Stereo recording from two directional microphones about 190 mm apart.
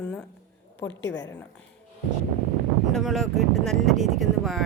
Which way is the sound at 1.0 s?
65° left (ahead or behind).